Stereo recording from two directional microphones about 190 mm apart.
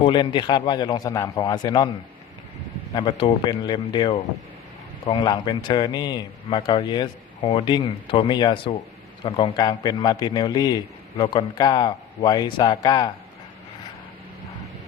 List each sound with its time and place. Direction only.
0.0 s a man's voice: 25° left (ahead or behind)
2.9 s a man's voice: 25° left (ahead or behind)